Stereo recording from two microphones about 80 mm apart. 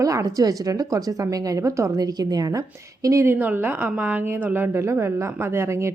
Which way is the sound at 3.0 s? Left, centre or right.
Right.